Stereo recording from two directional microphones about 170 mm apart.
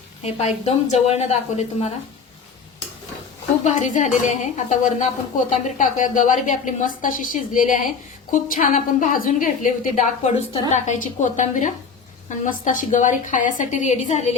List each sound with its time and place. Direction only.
0.2 s a woman's voice: 40° left (ahead or behind)
3.6 s a woman's voice: 45° left (ahead or behind)